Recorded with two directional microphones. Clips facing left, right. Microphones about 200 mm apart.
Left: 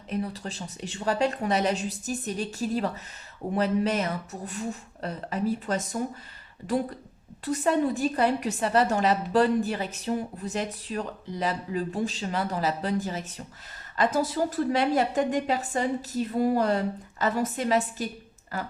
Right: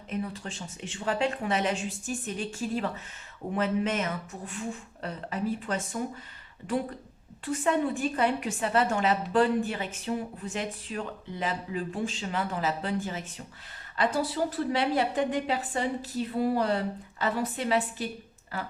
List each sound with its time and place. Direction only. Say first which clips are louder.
0.1 s a woman's voice: left 3 dB; 40° left (ahead or behind)